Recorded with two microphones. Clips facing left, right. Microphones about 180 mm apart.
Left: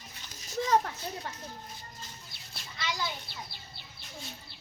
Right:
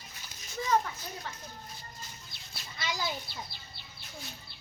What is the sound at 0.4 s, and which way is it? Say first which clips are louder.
Children playing: left 2 dB; 40° left (ahead or behind).